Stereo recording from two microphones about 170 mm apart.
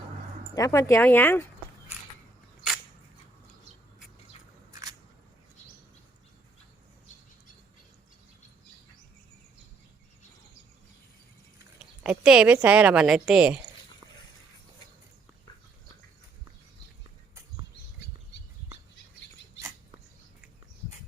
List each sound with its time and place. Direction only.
0.5 s speech: 20° left (ahead or behind)
12.0 s a woman's voice: 5° right (ahead or behind)